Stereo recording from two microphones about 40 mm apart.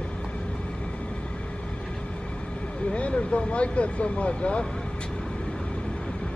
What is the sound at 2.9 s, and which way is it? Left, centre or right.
Speech, left.